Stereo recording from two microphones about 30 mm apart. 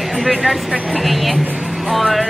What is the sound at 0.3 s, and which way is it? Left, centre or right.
Speech, centre.